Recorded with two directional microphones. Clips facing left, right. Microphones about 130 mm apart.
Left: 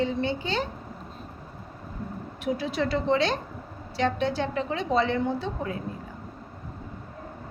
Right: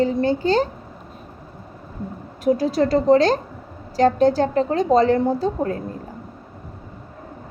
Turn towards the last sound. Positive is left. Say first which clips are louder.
# right 8 dB
turn(degrees=-40)  # may be behind; listen again after turning